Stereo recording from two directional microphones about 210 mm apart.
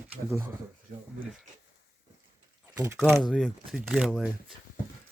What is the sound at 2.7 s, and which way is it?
Speech, 10° right (ahead or behind).